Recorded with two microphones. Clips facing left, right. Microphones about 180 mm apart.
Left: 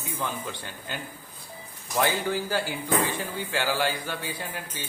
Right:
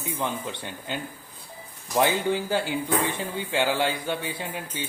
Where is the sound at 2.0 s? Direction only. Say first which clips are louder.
Right 3 dB; 20° right (ahead or behind).